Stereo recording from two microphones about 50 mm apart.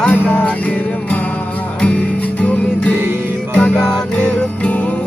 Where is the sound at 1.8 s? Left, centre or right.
Left.